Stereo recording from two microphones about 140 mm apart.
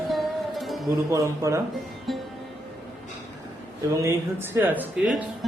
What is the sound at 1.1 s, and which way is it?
Speech, 20° right (ahead or behind).